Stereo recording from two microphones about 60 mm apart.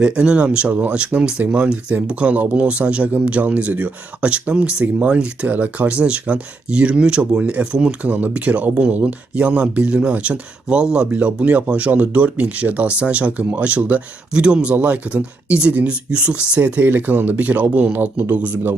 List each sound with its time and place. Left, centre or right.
0.0 s speech: centre